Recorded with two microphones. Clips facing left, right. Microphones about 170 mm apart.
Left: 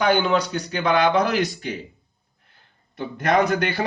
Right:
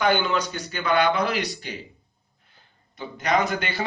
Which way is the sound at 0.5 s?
40° left (ahead or behind).